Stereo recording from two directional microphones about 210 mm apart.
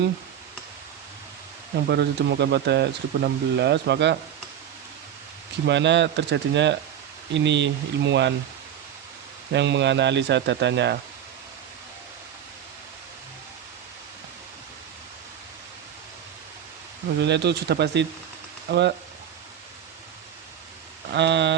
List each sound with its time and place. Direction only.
1.9 s speech: 50° right (ahead or behind)
5.6 s a man's voice: 55° right (ahead or behind)
9.5 s a man's voice: 55° right (ahead or behind)
17.2 s speech: 55° right (ahead or behind)
21.1 s speech: 55° right (ahead or behind)